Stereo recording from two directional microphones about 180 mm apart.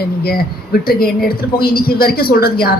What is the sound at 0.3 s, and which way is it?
Speech, 55° left (ahead or behind).